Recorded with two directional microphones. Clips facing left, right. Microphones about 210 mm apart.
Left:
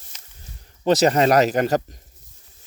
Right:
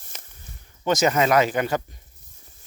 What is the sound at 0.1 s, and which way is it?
Snake, 55° right (ahead or behind).